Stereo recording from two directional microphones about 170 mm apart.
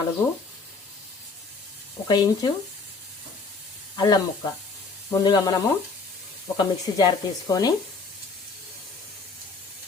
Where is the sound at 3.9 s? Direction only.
25° left (ahead or behind).